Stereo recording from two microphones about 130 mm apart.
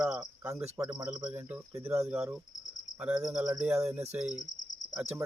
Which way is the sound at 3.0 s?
5° right (ahead or behind).